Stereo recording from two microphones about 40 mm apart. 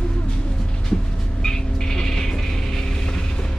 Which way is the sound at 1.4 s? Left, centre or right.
Centre.